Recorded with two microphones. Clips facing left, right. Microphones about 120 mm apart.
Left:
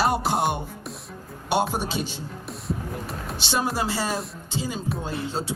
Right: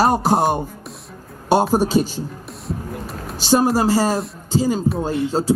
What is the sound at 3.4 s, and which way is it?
Speech, 40° right (ahead or behind).